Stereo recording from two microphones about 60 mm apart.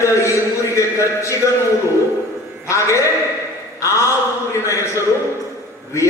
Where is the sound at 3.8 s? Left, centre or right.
Left.